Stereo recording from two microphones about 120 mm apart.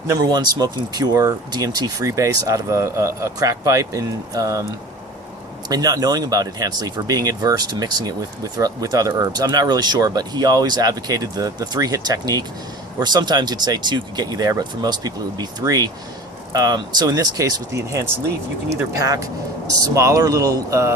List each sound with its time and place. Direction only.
0.1 s speech: 30° right (ahead or behind)
5.6 s speech: 30° right (ahead or behind)